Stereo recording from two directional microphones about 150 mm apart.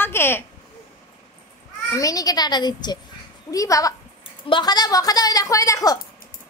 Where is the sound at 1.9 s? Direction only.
20° left (ahead or behind).